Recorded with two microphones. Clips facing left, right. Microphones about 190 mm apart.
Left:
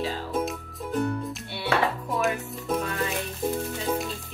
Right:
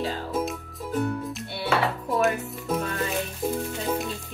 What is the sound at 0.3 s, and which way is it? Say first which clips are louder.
Music: even; centre (ahead or behind).